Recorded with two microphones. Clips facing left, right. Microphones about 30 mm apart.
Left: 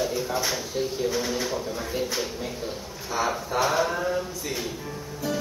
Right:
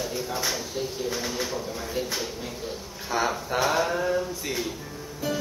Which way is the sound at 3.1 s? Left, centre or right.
Right.